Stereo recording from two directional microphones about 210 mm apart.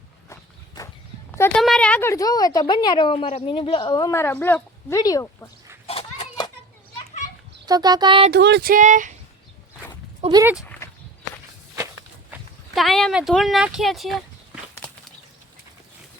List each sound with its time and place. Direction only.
0.8 s walk: 15° left (ahead or behind)
1.4 s a woman's voice: centre (ahead or behind)
5.9 s a sound: 25° left (ahead or behind)
7.6 s speech: 20° right (ahead or behind)
8.3 s speech: 55° right (ahead or behind); by 9.1 s 35° right (ahead or behind)
10.2 s speech: 25° right (ahead or behind)
10.4 s speech: 5° right (ahead or behind)
12.3 s clip-clop: centre (ahead or behind)